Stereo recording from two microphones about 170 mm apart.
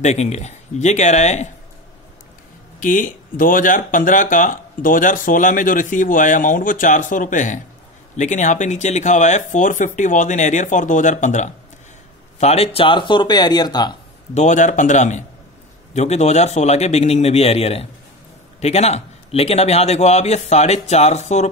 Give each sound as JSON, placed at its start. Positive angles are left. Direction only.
{"t": 0.0, "sound": "speech", "side_deg": 40}
{"t": 2.8, "sound": "speech", "side_deg": 50}
{"t": 14.3, "sound": "a man's voice", "side_deg": 45}